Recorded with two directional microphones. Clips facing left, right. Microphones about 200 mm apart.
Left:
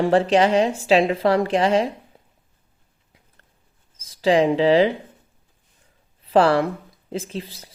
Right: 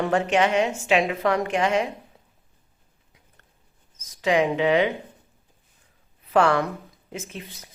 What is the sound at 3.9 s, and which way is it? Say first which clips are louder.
Speech: left 4 dB; 30° left (ahead or behind).